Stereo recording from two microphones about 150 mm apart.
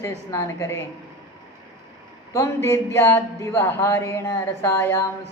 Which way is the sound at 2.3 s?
15° left (ahead or behind).